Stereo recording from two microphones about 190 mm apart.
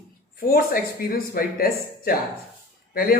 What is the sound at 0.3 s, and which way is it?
Speech, 50° left (ahead or behind).